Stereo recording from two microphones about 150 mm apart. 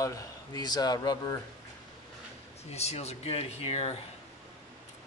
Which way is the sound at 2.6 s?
45° left (ahead or behind).